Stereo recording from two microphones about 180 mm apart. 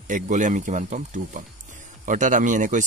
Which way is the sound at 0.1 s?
45° right (ahead or behind).